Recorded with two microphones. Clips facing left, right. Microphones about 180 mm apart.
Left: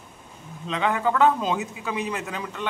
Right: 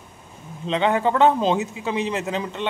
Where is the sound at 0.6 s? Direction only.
30° right (ahead or behind).